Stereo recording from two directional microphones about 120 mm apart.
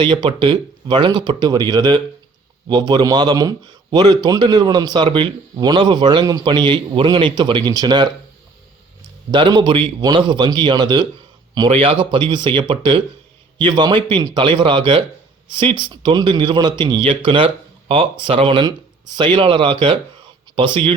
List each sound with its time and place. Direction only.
0.0 s a man's voice: 40° right (ahead or behind)
9.3 s a man's voice: 40° right (ahead or behind)